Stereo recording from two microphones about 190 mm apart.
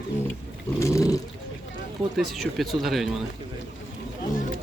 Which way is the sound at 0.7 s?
15° left (ahead or behind).